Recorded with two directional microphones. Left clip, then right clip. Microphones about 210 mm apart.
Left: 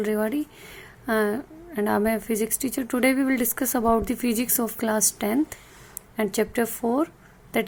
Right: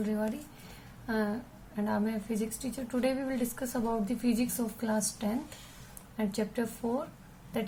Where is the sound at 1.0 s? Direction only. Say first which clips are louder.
Left 10 dB; 50° left (ahead or behind).